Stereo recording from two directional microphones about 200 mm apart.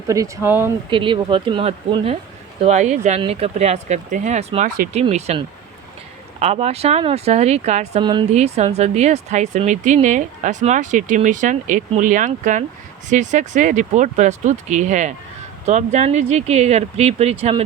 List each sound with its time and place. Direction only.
0.1 s speech: 15° right (ahead or behind)
0.9 s speech: 25° right (ahead or behind)